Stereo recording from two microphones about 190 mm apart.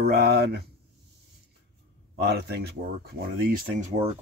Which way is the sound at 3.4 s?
50° right (ahead or behind).